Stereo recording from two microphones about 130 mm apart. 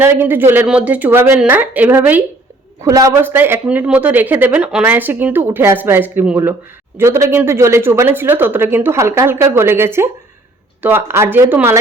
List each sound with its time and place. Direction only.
0.0 s speech: 15° right (ahead or behind)
2.8 s speech: 25° right (ahead or behind)